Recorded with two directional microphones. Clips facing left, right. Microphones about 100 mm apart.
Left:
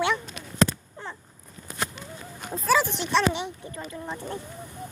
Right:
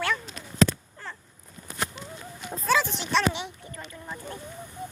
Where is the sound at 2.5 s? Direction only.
Centre (ahead or behind).